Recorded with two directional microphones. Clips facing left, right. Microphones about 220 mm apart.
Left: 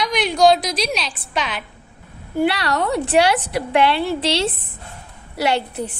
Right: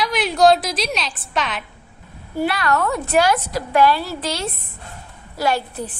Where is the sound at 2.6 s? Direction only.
35° left (ahead or behind).